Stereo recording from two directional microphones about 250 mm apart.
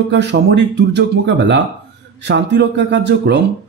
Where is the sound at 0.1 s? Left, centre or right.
Right.